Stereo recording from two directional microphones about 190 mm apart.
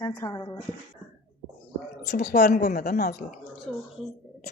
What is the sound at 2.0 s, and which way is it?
A woman's voice, 60° left (ahead or behind).